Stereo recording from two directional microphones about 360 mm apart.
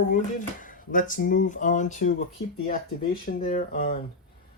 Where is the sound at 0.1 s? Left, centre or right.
Left.